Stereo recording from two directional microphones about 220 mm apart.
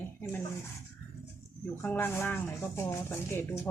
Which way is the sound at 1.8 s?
10° left (ahead or behind).